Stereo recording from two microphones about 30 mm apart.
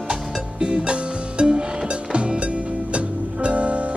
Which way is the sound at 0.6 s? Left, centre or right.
Right.